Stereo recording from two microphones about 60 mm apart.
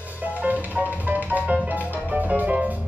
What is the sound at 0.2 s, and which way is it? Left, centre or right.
Music, right.